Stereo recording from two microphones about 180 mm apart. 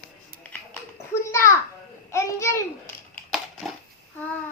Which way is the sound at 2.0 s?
15° left (ahead or behind).